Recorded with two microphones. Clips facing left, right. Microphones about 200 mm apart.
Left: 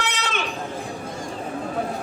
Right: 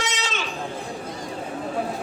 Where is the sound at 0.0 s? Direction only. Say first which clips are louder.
Left 1 dB; 60° left (ahead or behind).